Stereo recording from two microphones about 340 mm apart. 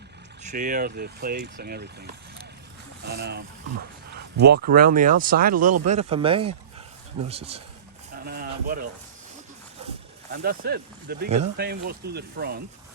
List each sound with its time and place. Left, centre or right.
0.4 s speech: right
3.1 s speech: right
8.2 s a sound: right
10.3 s speech: right